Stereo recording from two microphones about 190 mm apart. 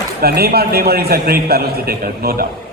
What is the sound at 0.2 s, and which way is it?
A man's voice, 55° right (ahead or behind).